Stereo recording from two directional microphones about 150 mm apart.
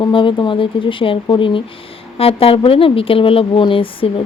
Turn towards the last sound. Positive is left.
turn(degrees=35)  # may be behind; listen again after turning